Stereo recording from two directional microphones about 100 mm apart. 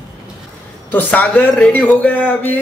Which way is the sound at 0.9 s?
15° left (ahead or behind).